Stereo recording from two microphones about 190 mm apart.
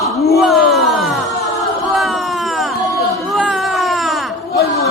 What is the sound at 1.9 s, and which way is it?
Crowd, centre (ahead or behind).